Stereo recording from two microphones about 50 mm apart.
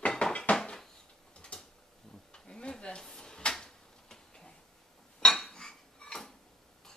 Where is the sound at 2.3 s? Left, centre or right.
Centre.